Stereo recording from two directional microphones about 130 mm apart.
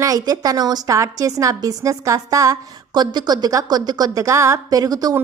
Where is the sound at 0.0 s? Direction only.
25° right (ahead or behind).